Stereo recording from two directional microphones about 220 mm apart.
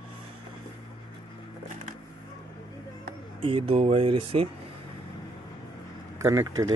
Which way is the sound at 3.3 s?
25° right (ahead or behind).